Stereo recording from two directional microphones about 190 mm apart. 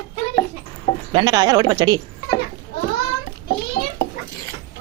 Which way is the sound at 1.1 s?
20° right (ahead or behind).